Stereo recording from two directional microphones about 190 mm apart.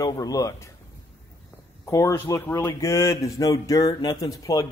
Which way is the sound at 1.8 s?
15° left (ahead or behind).